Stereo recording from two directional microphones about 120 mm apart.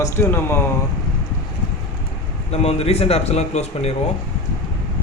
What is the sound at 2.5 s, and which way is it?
Speech, 65° left (ahead or behind).